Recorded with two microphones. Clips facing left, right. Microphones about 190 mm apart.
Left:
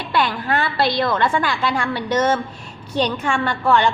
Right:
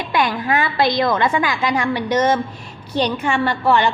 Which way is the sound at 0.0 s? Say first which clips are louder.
Right 1 dB; 15° right (ahead or behind).